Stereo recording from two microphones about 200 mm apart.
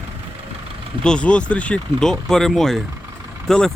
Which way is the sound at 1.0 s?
5° left (ahead or behind).